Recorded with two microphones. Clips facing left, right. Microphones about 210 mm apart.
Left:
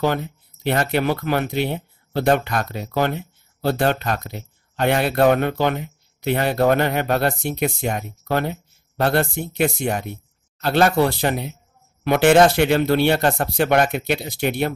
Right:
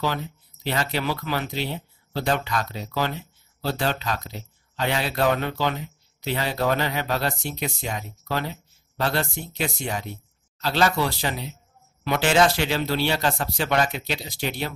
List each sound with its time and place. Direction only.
0.0 s speech: 55° left (ahead or behind)